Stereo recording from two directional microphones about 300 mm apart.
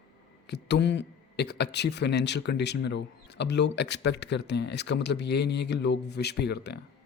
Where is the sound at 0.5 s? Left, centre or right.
Left.